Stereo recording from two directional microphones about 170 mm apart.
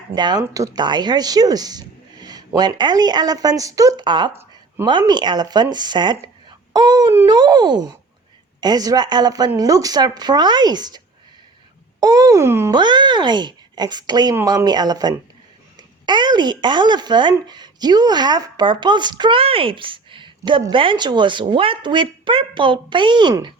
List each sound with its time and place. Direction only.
0.1 s speech: 25° right (ahead or behind)
4.3 s a sound: 15° right (ahead or behind)
4.9 s speech: 25° right (ahead or behind)
12.8 s speech: 25° right (ahead or behind)